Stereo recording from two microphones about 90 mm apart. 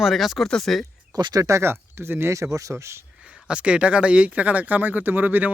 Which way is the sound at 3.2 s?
10° right (ahead or behind).